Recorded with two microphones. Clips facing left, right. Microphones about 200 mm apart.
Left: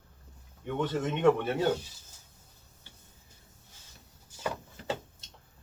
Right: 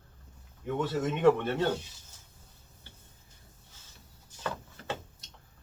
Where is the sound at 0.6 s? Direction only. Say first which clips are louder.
Even; 5° right (ahead or behind).